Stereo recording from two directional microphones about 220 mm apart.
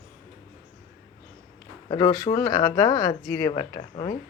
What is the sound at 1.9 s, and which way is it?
Speech, 20° left (ahead or behind).